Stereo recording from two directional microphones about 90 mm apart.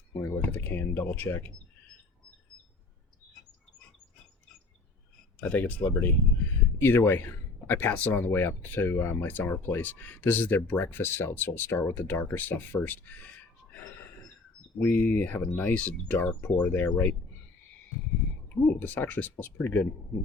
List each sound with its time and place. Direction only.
0.1 s speech: 20° left (ahead or behind)
5.4 s speech: 15° left (ahead or behind)
13.7 s a sound: 20° left (ahead or behind)
14.8 s speech: 15° left (ahead or behind)
18.4 s speech: 20° left (ahead or behind)